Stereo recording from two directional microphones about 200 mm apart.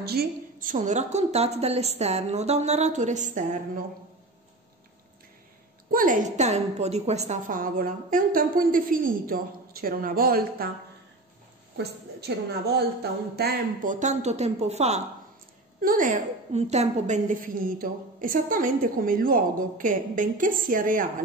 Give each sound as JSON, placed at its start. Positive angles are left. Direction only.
{"t": 0.0, "sound": "a woman's voice", "side_deg": -50}
{"t": 5.9, "sound": "a woman's voice", "side_deg": -45}
{"t": 11.7, "sound": "a woman's voice", "side_deg": -55}
{"t": 13.4, "sound": "a woman's voice", "side_deg": -40}